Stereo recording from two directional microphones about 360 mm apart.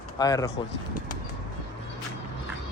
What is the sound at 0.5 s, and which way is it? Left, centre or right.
Speech, left.